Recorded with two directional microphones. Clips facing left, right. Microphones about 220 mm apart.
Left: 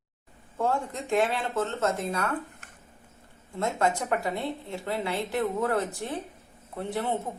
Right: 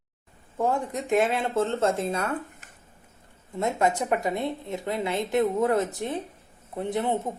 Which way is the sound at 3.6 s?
20° right (ahead or behind).